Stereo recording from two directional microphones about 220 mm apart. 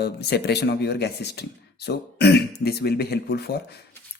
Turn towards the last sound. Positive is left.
turn(degrees=45)  # may be behind; listen again after turning